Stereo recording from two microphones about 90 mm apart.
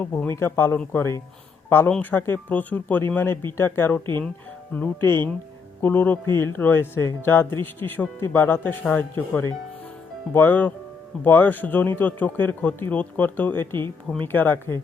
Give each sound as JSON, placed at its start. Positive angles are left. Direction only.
{"t": 0.0, "sound": "a man's voice", "side_deg": 25}